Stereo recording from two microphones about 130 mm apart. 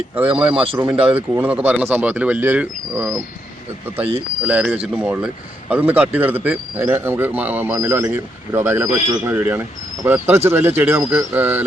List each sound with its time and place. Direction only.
0.2 s speech: 10° right (ahead or behind)
4.9 s speech: 10° right (ahead or behind)